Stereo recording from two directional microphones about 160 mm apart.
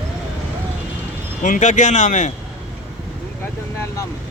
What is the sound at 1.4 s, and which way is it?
Speech, 50° left (ahead or behind).